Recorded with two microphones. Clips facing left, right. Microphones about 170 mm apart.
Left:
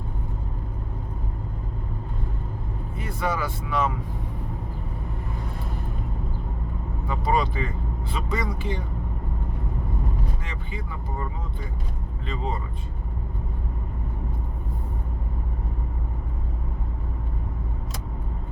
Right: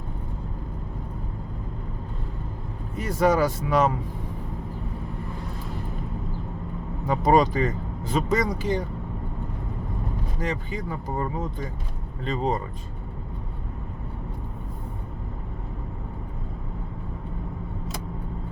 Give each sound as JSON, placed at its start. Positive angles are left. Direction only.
{"t": 3.0, "sound": "speech", "side_deg": -40}
{"t": 7.1, "sound": "speech", "side_deg": -40}
{"t": 10.4, "sound": "speech", "side_deg": -40}